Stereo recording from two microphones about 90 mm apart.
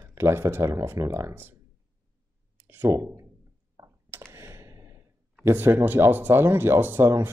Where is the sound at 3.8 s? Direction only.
35° right (ahead or behind).